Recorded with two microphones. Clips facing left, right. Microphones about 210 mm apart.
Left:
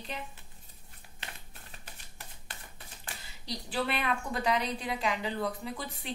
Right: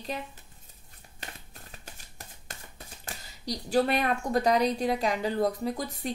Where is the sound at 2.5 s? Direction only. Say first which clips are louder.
Right 5 dB; 40° right (ahead or behind).